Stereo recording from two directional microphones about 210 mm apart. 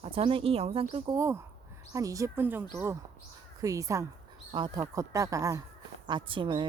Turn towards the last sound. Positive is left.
turn(degrees=-25)  # may be behind; listen again after turning